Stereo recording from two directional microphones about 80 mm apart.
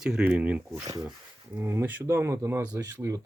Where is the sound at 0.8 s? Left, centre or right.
Right.